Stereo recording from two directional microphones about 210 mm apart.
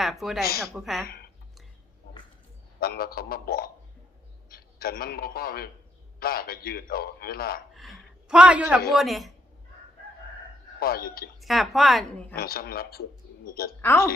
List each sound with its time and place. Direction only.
0.0 s a woman's voice: centre (ahead or behind)
1.0 s speech: 50° left (ahead or behind)
2.8 s a man's voice: 45° left (ahead or behind)
7.8 s a woman's voice: centre (ahead or behind)
10.8 s a man's voice: 45° left (ahead or behind)
11.3 s a woman's voice: centre (ahead or behind)
12.3 s a man's voice: 45° left (ahead or behind)
13.8 s speech: 10° left (ahead or behind)